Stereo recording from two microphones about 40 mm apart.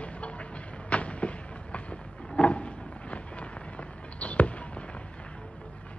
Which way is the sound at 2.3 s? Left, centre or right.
Left.